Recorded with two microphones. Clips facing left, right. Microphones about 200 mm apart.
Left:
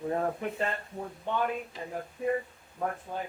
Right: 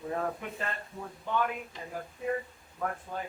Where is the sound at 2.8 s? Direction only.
30° left (ahead or behind).